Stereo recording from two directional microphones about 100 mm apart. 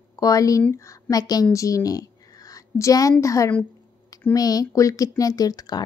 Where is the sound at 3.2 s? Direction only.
35° left (ahead or behind).